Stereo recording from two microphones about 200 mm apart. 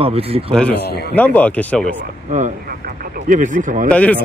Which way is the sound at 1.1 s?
10° left (ahead or behind).